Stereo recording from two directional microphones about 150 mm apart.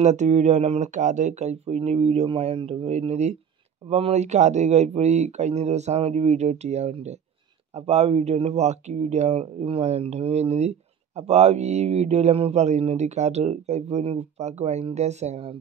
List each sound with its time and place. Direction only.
0.0 s speech: 50° right (ahead or behind)